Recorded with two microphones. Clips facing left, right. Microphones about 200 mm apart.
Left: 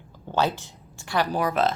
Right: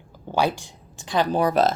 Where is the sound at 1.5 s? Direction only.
40° right (ahead or behind).